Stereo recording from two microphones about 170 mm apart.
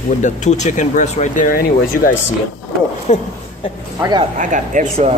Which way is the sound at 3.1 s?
40° left (ahead or behind).